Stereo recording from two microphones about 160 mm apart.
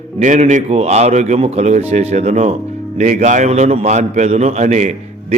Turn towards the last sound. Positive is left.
turn(degrees=-45)  # may be behind; listen again after turning